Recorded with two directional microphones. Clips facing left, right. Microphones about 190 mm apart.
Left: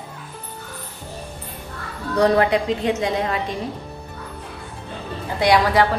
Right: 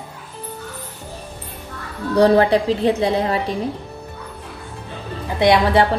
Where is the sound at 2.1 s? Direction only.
30° right (ahead or behind).